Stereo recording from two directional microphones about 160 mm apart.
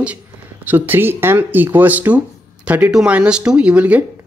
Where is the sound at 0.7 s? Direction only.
10° right (ahead or behind).